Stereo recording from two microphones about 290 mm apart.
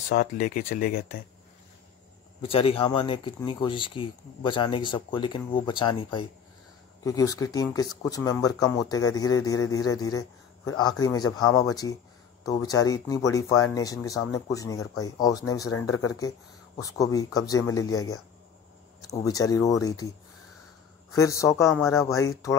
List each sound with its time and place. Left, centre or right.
0.1 s speech: left
2.4 s speech: centre
16.8 s speech: centre
21.1 s speech: centre